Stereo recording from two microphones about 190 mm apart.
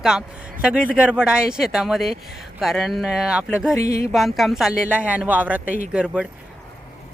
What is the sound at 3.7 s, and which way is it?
Speech, 15° left (ahead or behind).